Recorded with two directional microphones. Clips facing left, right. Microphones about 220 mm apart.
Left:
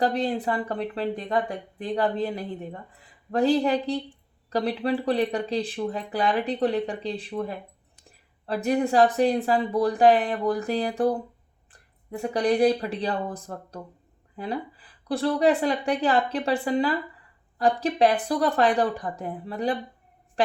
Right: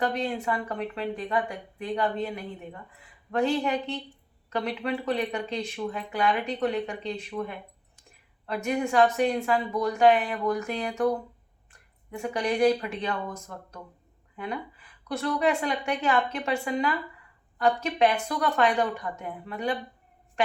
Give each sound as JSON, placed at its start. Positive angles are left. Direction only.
{"t": 0.0, "sound": "speech", "side_deg": 35}